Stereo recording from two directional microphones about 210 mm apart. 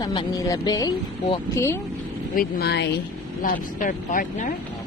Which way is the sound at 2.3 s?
50° left (ahead or behind).